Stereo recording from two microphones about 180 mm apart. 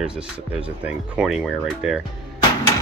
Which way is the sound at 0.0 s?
5° right (ahead or behind).